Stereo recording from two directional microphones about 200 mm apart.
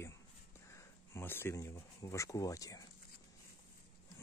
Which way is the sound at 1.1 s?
10° left (ahead or behind).